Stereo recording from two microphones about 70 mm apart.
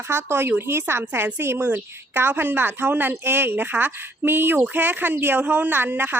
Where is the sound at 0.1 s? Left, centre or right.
Right.